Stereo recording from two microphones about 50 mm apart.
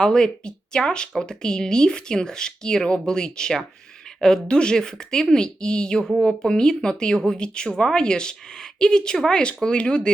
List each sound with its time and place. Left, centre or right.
0.0 s speech: centre